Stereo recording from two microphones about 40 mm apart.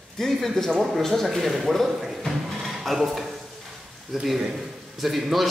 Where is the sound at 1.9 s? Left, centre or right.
Centre.